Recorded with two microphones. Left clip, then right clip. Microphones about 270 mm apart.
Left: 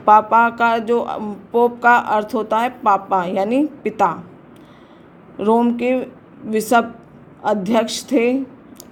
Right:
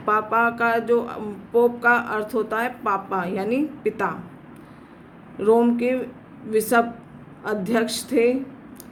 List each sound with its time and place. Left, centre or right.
0.0 s speech: left
5.4 s speech: centre